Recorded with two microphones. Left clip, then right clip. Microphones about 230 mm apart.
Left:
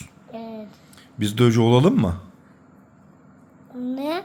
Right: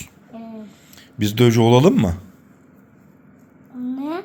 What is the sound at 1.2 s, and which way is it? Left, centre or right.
Speech, centre.